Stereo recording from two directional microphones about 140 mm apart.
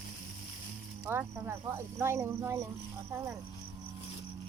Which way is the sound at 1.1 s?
20° right (ahead or behind).